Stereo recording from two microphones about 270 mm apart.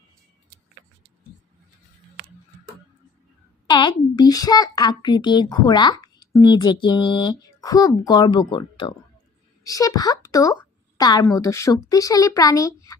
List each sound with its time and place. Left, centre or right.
3.7 s a child's voice: centre